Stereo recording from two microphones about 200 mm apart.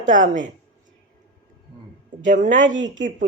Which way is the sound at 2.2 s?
40° right (ahead or behind).